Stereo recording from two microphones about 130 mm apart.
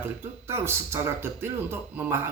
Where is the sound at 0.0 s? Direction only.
20° right (ahead or behind).